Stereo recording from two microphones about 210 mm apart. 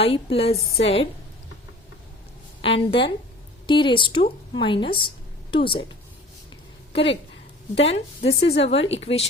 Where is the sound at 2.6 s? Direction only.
25° left (ahead or behind).